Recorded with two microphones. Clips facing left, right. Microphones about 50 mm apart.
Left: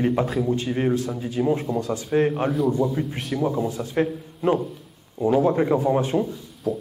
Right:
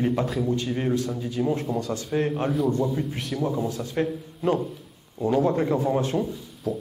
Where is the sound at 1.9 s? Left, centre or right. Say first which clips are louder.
Left 6 dB; centre.